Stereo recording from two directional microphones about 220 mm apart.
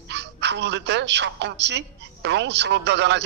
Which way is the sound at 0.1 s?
50° right (ahead or behind).